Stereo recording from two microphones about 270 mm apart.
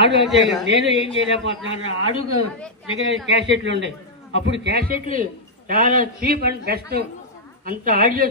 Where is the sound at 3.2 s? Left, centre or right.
Right.